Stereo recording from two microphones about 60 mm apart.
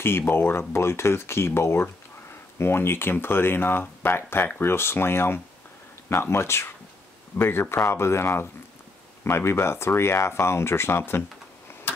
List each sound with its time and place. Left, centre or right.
0.3 s speech: left